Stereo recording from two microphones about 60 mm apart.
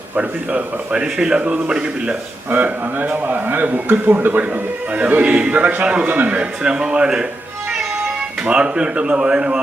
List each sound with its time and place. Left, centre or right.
0.2 s a man's voice: centre
2.5 s a man's voice: right
8.4 s a man's voice: centre